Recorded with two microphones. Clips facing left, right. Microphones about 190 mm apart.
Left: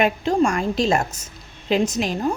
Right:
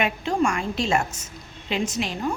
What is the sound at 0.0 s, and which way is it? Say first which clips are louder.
A woman's voice: left 4 dB; 40° left (ahead or behind).